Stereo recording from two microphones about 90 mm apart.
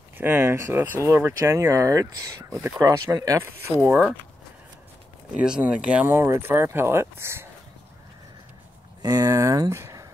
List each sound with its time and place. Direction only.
0.2 s speech: 25° right (ahead or behind)
3.4 s speech: 30° right (ahead or behind)
5.3 s speech: 10° right (ahead or behind)
6.1 s speech: 25° right (ahead or behind)
9.0 s speech: 40° right (ahead or behind)